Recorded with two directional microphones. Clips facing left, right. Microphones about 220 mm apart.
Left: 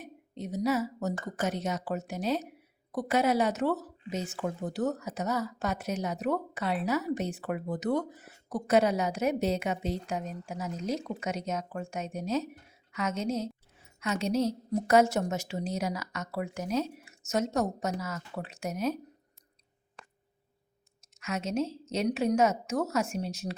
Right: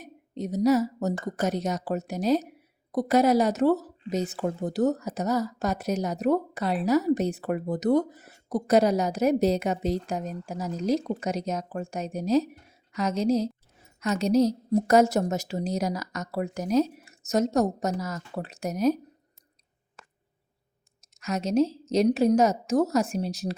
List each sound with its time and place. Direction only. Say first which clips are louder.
0.0 s speech: right 6 dB; 40° right (ahead or behind)
21.1 s speech: right 6 dB; 35° right (ahead or behind)